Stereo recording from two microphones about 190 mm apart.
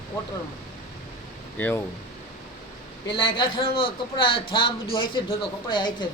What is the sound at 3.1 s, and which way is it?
A woman's voice, 25° left (ahead or behind).